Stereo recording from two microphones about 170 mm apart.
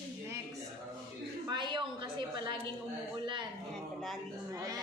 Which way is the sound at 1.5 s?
25° right (ahead or behind).